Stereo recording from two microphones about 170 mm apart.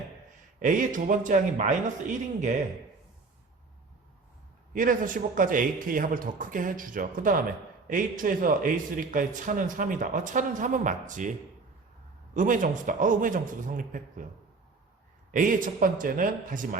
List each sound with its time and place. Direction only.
0.6 s a man's voice: 50° right (ahead or behind)
4.7 s a man's voice: 50° right (ahead or behind)
15.3 s a man's voice: 50° right (ahead or behind)